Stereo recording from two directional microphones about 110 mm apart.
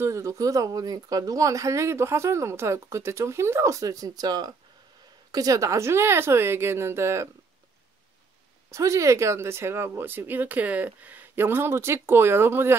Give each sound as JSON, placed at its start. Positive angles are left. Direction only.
{"t": 0.0, "sound": "speech", "side_deg": -30}
{"t": 8.6, "sound": "speech", "side_deg": -25}